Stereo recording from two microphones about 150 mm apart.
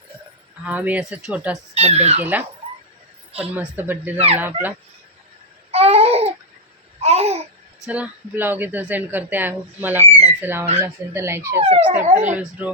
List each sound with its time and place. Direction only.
0.6 s a woman's voice: 10° right (ahead or behind)
1.7 s babbling: 45° right (ahead or behind)
3.5 s a woman's voice: 10° right (ahead or behind)
5.7 s babbling: 40° right (ahead or behind)
7.9 s a woman's voice: 10° right (ahead or behind)
11.6 s babbling: 45° right (ahead or behind)
12.3 s a woman's voice: 10° right (ahead or behind)